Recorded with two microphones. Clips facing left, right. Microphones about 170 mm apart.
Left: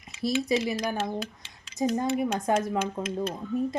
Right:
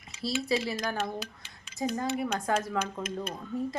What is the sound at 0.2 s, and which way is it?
Speech, 15° left (ahead or behind).